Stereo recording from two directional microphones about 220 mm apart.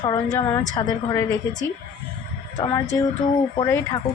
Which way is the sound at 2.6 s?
15° left (ahead or behind).